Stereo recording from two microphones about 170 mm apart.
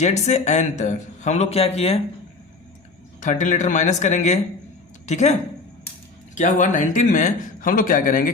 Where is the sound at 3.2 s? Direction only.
50° left (ahead or behind).